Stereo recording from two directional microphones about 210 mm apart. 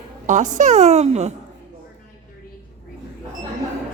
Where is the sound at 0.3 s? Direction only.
35° right (ahead or behind).